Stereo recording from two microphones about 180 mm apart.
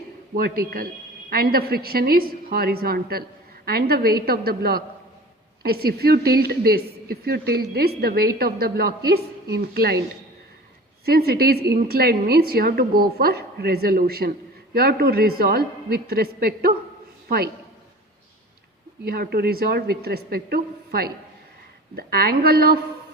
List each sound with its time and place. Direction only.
0.3 s a woman's voice: 55° right (ahead or behind)
11.0 s a woman's voice: 60° right (ahead or behind)
19.0 s a woman's voice: 60° right (ahead or behind)